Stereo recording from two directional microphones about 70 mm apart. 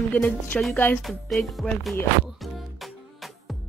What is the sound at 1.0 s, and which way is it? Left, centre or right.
Speech, centre.